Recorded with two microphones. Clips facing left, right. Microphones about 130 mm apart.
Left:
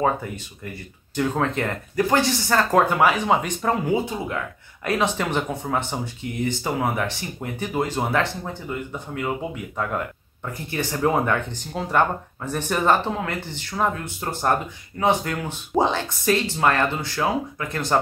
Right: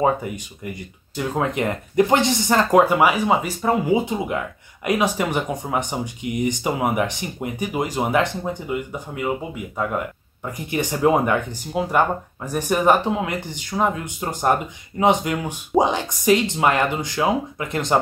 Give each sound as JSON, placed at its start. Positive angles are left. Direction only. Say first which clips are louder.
{"t": 0.0, "sound": "speech", "louder": "right 3 dB", "side_deg": -15}